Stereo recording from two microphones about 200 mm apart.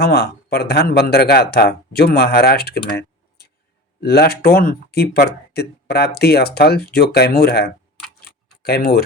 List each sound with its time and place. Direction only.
0.0 s speech: 50° left (ahead or behind)
2.9 s typing: 55° left (ahead or behind)
4.0 s speech: 50° left (ahead or behind)
8.3 s tick-tock: 50° left (ahead or behind)